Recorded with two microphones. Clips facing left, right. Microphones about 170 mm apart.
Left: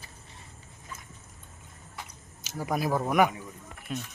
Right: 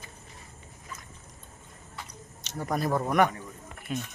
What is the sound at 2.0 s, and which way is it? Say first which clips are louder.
Speech: right 3 dB; 5° left (ahead or behind).